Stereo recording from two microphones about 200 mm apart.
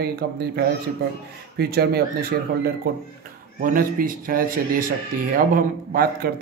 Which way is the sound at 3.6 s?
45° right (ahead or behind).